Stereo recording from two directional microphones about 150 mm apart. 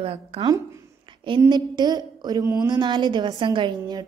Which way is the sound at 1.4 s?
30° right (ahead or behind).